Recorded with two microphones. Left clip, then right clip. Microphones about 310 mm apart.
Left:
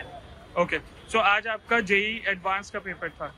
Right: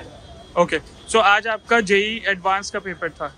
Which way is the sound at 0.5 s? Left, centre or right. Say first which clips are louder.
Right 7 dB; centre.